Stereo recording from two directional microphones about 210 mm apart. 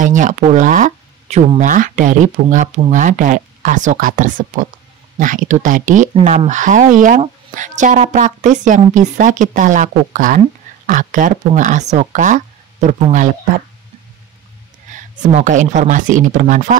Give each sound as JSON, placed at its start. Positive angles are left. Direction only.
{"t": 0.0, "sound": "speech", "side_deg": -35}
{"t": 15.0, "sound": "speech", "side_deg": -35}